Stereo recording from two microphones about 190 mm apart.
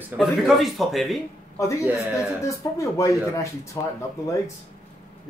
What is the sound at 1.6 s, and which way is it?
Speech, 15° left (ahead or behind).